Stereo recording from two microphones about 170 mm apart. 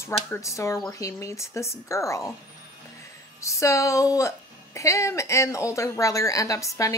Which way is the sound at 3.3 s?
15° left (ahead or behind).